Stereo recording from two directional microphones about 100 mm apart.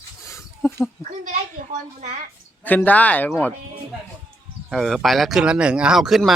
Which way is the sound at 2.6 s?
15° left (ahead or behind).